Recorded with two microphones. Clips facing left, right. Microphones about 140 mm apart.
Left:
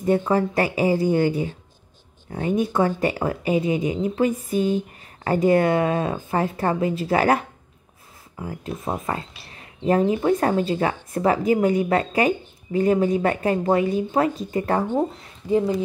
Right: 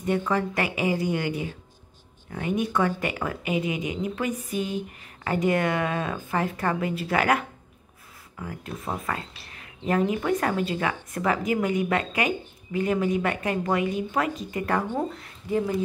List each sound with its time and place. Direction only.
0.0 s a woman's voice: 35° left (ahead or behind)